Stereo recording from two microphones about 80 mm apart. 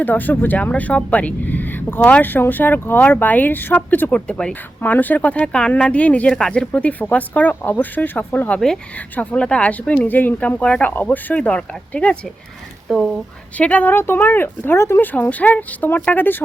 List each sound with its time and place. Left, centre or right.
0.0 s speech: left
12.9 s speech: centre
13.6 s speech: centre